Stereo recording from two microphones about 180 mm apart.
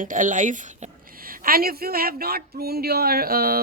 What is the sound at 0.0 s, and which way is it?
Speech, 45° right (ahead or behind).